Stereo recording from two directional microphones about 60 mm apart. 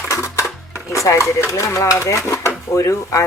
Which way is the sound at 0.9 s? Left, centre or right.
Left.